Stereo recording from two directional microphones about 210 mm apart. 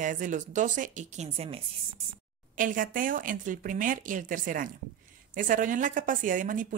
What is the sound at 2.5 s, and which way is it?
Speech, 40° right (ahead or behind).